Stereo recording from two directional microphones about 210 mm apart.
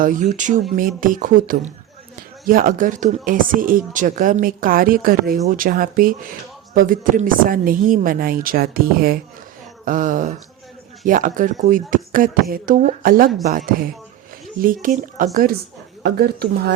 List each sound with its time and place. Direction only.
0.0 s speech: 40° right (ahead or behind)
14.6 s speech: 40° right (ahead or behind)